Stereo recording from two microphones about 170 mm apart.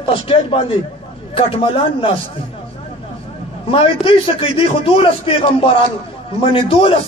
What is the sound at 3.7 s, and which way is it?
A man's voice, 30° left (ahead or behind).